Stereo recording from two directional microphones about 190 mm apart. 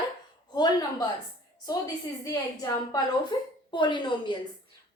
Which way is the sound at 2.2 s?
20° left (ahead or behind).